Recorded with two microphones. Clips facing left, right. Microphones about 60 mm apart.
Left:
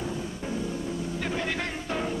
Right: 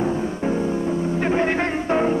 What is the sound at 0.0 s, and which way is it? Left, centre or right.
Music, right.